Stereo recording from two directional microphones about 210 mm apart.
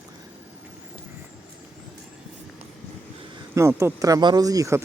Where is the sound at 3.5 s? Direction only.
15° right (ahead or behind).